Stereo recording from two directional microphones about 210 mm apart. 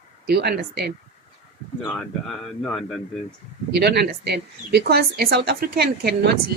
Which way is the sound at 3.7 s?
50° right (ahead or behind).